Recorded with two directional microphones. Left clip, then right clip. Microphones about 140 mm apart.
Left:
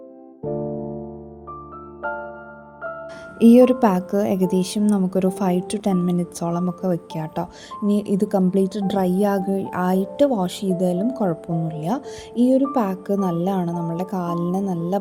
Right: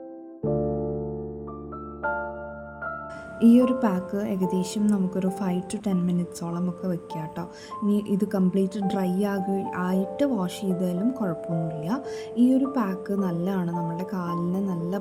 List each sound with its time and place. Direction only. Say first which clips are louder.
3.4 s speech: left 7 dB; 50° left (ahead or behind)